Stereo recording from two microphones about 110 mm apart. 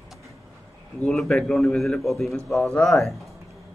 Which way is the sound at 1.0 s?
5° left (ahead or behind).